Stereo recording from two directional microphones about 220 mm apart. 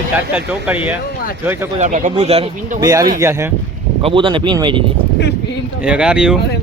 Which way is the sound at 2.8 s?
15° right (ahead or behind).